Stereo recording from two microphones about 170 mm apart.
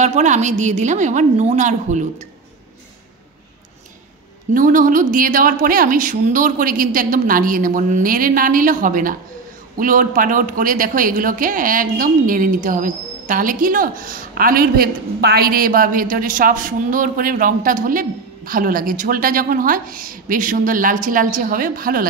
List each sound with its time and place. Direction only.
0.0 s speech: 45° right (ahead or behind)
4.6 s speech: 50° right (ahead or behind)